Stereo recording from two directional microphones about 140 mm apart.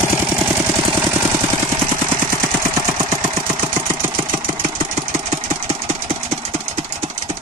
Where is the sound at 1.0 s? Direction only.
10° right (ahead or behind).